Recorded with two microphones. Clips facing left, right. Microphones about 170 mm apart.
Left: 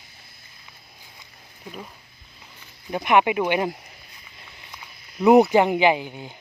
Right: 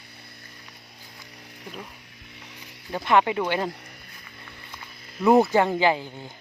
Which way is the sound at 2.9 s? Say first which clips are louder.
Left 2 dB; 15° left (ahead or behind).